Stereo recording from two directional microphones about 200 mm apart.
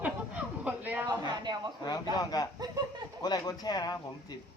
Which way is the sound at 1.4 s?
20° right (ahead or behind).